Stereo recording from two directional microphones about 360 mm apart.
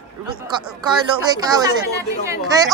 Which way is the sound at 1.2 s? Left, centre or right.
Centre.